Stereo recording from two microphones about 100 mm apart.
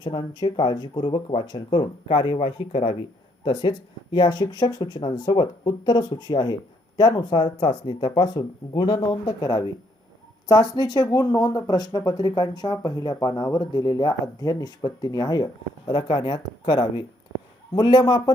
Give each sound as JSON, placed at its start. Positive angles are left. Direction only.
{"t": 0.0, "sound": "speech", "side_deg": 50}
{"t": 2.0, "sound": "speech", "side_deg": 70}